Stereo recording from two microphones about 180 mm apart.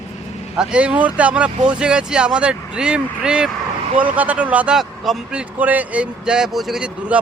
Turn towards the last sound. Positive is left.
turn(degrees=-5)  # may be behind; listen again after turning